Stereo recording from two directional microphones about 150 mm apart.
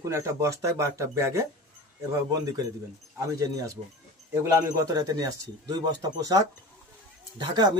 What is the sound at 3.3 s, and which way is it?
Speech, 25° right (ahead or behind).